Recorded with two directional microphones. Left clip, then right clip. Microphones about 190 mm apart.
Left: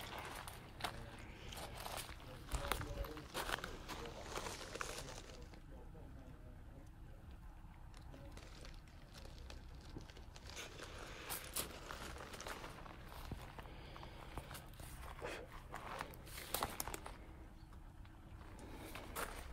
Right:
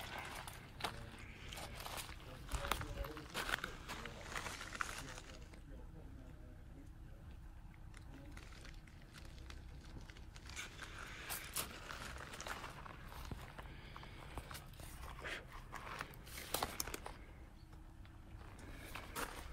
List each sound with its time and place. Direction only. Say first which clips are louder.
0.1 s a sound: right 1 dB; 10° left (ahead or behind)
10.5 s dog: right 1 dB; 15° left (ahead or behind)
11.5 s a sound: right 1 dB; 5° left (ahead or behind)
13.8 s walk: even; 20° left (ahead or behind)
15.7 s walk: even; centre (ahead or behind)
18.9 s walk: right 1 dB; 5° left (ahead or behind)